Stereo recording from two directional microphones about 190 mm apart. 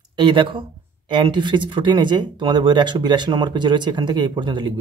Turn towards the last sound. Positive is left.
turn(degrees=-25)  # may be behind; listen again after turning